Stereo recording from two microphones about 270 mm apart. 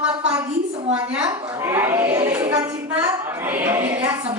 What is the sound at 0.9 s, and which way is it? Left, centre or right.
Speech, centre.